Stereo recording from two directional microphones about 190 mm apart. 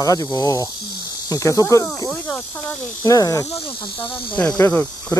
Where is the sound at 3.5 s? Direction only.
30° left (ahead or behind).